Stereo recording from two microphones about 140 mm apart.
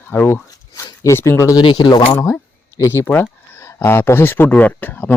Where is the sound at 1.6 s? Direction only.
35° left (ahead or behind).